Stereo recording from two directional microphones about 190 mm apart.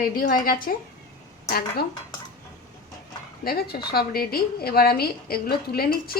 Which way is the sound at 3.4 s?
55° left (ahead or behind).